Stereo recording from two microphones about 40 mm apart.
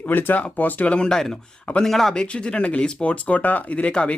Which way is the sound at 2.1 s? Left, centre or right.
Left.